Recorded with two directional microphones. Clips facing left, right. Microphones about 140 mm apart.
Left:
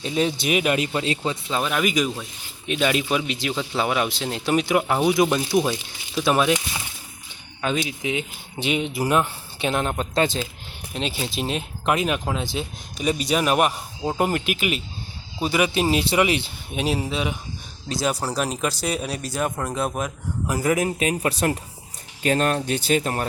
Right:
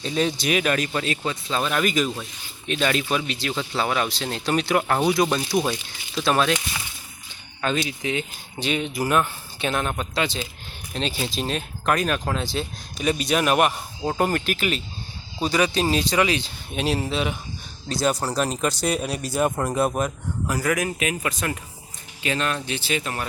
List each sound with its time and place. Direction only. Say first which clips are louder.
0.0 s speech: left 1 dB; 15° left (ahead or behind)
7.6 s speech: even; 10° left (ahead or behind)
10.2 s speech: left 5 dB; 45° left (ahead or behind)
10.9 s speech: even; 15° left (ahead or behind)
12.5 s a man's voice: even; 5° left (ahead or behind); by 16.1 s 20° left (ahead or behind)
16.7 s a man's voice: even; 5° left (ahead or behind)
20.5 s speech: left 3 dB; 20° left (ahead or behind)
22.2 s speech: left 5 dB; 45° left (ahead or behind)